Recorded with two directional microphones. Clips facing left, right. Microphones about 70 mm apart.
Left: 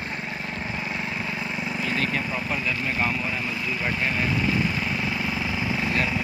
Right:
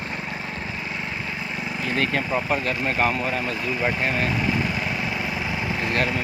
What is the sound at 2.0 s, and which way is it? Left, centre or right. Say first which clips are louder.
Speech: right 3 dB; right.